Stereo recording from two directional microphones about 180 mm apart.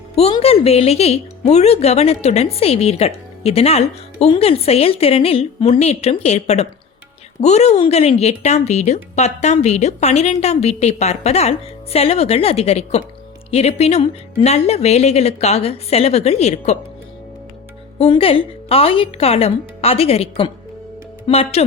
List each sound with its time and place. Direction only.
0.2 s a woman's voice: 35° left (ahead or behind)
18.0 s a woman's voice: 30° left (ahead or behind)